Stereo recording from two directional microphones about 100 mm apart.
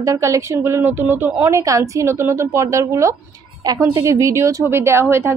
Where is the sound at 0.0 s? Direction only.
30° right (ahead or behind).